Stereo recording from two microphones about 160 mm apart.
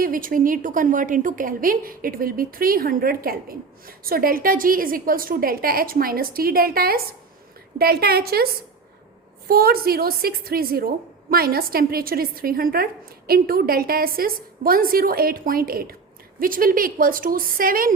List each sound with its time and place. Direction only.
0.0 s a woman's voice: 60° right (ahead or behind)
9.5 s a woman's voice: 70° right (ahead or behind)